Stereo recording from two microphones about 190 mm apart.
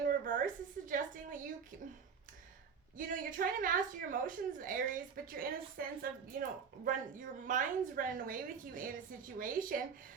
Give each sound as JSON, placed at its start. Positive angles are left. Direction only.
{"t": 0.0, "sound": "a woman's voice", "side_deg": -45}
{"t": 3.1, "sound": "a woman's voice", "side_deg": -45}